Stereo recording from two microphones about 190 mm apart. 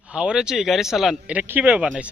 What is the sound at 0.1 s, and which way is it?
Speech, 5° right (ahead or behind).